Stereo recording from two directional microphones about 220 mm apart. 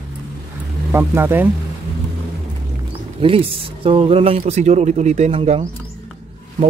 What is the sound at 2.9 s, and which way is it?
Speech, 25° right (ahead or behind).